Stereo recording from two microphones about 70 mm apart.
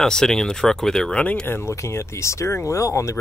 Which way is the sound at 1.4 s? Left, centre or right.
Left.